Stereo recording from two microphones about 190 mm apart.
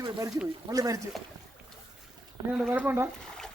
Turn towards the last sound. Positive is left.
turn(degrees=-10)  # may be behind; listen again after turning